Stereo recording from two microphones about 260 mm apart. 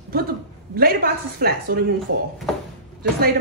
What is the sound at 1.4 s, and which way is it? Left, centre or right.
Speech, right.